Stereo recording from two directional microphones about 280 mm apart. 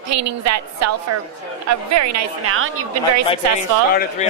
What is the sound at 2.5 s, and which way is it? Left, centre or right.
Speech, right.